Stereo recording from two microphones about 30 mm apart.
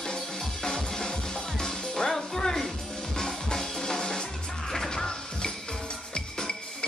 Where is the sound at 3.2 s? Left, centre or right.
Centre.